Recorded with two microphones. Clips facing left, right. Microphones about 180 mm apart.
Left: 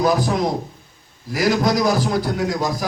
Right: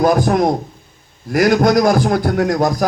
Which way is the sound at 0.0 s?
50° right (ahead or behind).